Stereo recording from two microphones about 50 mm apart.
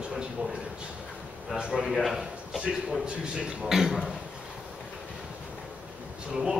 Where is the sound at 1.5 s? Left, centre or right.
Centre.